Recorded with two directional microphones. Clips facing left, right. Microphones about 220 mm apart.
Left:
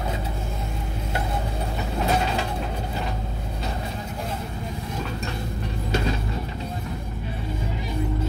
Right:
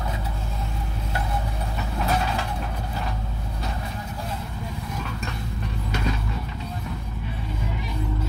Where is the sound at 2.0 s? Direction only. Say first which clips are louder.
Left 2 dB; 25° left (ahead or behind).